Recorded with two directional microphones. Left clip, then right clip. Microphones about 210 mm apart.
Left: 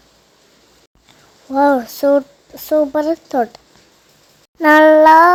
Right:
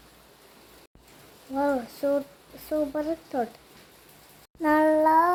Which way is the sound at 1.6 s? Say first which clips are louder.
Left 13 dB; 30° left (ahead or behind).